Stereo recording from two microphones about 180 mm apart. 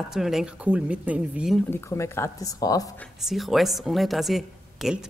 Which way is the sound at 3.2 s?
Centre (ahead or behind).